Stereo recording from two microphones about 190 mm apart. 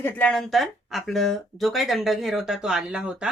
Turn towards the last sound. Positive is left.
turn(degrees=-5)  # may be behind; listen again after turning